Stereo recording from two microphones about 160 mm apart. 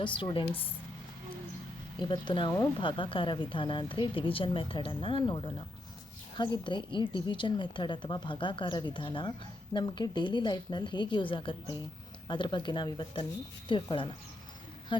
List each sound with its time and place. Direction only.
0.0 s a woman's voice: 30° left (ahead or behind)
2.0 s a woman's voice: 30° left (ahead or behind)